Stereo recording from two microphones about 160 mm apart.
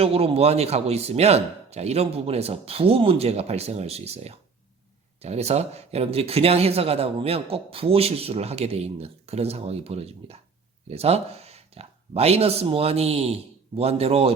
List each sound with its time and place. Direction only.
0.0 s speech: 40° right (ahead or behind)